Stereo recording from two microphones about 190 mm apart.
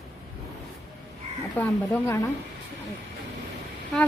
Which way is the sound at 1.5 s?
10° left (ahead or behind).